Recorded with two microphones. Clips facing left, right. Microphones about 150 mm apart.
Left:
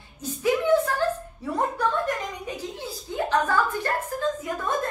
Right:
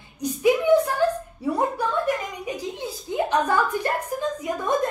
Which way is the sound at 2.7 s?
20° right (ahead or behind).